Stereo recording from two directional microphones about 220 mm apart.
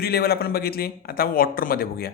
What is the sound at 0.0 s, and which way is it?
Speech, 45° left (ahead or behind).